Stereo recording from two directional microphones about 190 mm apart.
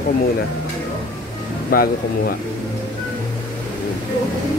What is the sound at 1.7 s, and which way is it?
Speech, 50° left (ahead or behind).